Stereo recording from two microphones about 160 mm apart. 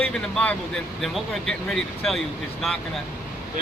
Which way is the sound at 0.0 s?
5° left (ahead or behind).